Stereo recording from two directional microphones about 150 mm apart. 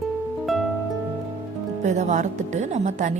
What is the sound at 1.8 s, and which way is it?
Speech, 55° right (ahead or behind).